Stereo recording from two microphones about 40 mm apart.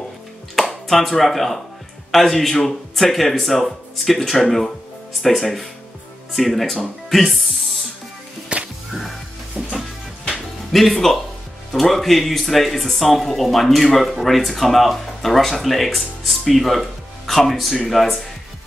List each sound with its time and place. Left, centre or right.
0.6 s speech: centre
7.2 s music: centre
8.5 s music: right
9.6 s music: centre
10.7 s speech: centre